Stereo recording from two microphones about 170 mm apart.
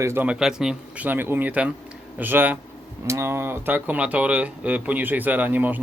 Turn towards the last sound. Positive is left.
turn(degrees=-10)  # may be behind; listen again after turning